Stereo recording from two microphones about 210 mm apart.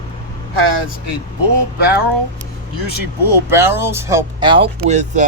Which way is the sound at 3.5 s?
10° right (ahead or behind).